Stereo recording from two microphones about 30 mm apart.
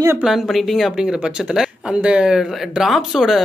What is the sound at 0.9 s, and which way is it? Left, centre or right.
Speech, right.